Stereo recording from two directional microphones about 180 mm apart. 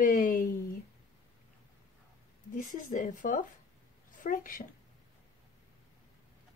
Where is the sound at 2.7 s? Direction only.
45° left (ahead or behind).